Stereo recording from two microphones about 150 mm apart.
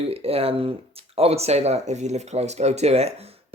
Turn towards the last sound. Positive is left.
turn(degrees=-45)  # may be behind; listen again after turning